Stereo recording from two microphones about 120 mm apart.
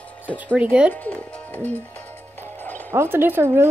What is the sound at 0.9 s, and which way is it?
Speech, 15° left (ahead or behind).